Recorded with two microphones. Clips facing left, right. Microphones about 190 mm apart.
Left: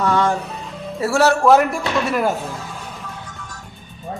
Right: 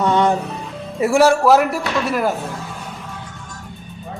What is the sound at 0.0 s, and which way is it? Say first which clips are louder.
Music: right 2 dB; 20° right (ahead or behind).